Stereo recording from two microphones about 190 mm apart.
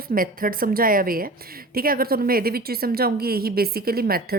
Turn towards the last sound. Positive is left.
turn(degrees=-50)  # may be behind; listen again after turning